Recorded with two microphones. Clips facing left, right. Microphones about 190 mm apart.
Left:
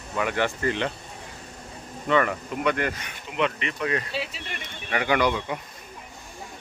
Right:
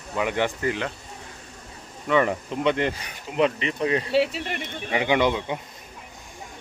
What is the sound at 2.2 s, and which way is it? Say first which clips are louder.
Speech: right 2 dB; 25° right (ahead or behind).